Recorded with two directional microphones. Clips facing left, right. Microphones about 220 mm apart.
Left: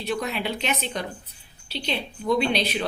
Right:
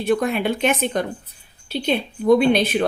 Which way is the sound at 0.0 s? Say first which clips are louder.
Right 8 dB; 50° right (ahead or behind).